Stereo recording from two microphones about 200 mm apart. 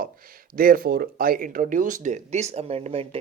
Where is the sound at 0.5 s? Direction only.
45° right (ahead or behind).